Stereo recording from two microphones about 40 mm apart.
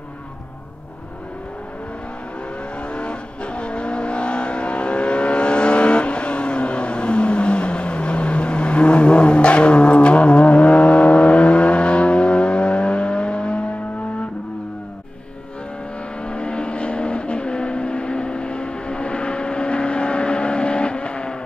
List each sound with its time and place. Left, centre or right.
2.9 s vehicle: left
16.3 s vehicle: left